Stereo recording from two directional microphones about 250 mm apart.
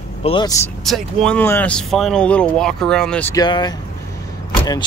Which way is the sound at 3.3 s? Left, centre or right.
Centre.